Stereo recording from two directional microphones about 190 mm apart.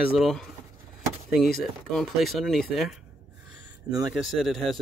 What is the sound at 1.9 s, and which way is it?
Speech, centre (ahead or behind).